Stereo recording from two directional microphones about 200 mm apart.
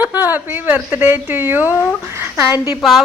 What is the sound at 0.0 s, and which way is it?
A woman's voice, 10° right (ahead or behind).